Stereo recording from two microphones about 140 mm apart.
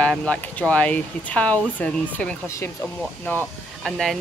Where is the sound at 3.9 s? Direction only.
Centre (ahead or behind).